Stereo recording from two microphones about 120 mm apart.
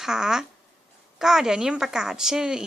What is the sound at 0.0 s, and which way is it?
A woman's voice, 5° right (ahead or behind).